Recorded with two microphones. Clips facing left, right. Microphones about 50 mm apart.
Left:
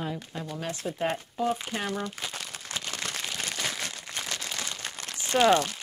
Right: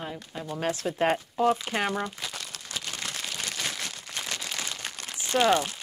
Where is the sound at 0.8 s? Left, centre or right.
Right.